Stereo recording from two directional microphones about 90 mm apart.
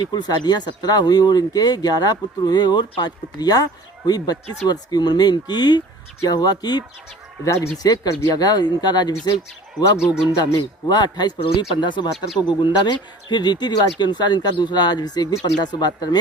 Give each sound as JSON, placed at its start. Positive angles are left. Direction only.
{"t": 0.0, "sound": "speech", "side_deg": 50}
{"t": 7.4, "sound": "speech", "side_deg": 35}
{"t": 7.9, "sound": "speech", "side_deg": 50}
{"t": 10.3, "sound": "speech", "side_deg": 50}